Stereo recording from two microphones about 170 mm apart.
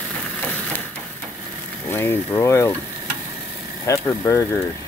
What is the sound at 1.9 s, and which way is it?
Speech, 15° left (ahead or behind).